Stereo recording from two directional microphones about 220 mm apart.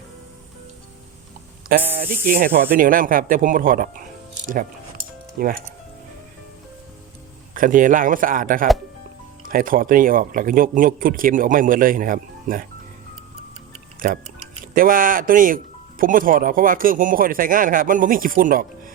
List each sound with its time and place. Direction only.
1.6 s speech: 40° right (ahead or behind)
5.4 s speech: 40° right (ahead or behind)
7.5 s speech: 40° right (ahead or behind)
14.0 s speech: 40° right (ahead or behind)